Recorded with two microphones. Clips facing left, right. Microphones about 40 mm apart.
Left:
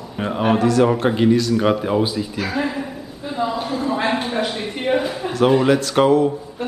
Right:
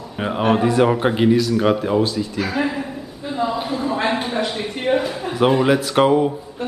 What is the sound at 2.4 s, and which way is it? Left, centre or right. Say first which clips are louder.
Speech: right 1 dB; centre.